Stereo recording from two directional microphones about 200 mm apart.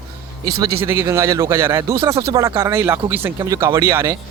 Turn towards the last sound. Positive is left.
turn(degrees=-10)  # may be behind; listen again after turning